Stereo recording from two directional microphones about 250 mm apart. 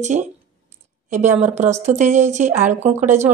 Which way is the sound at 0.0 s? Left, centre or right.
Right.